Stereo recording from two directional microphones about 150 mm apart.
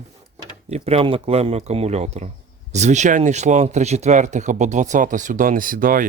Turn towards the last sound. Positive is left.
turn(degrees=-70)  # may be behind; listen again after turning